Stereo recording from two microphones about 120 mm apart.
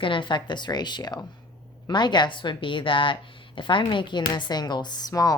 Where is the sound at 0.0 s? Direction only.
45° left (ahead or behind).